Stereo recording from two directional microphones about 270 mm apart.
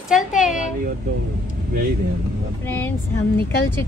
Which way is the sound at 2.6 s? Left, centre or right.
Centre.